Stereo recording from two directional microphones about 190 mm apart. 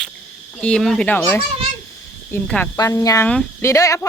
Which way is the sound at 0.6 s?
5° left (ahead or behind).